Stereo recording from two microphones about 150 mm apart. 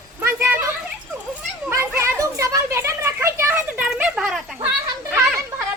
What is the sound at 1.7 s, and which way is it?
Children playing, 15° right (ahead or behind).